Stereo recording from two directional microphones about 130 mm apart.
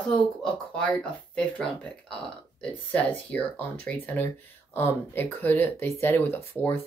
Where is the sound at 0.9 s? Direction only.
5° left (ahead or behind).